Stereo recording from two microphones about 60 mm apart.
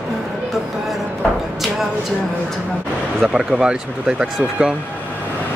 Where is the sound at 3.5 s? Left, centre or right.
Centre.